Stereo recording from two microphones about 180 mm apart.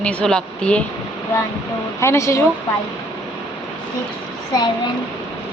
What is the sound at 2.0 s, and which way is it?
Speech, 15° left (ahead or behind).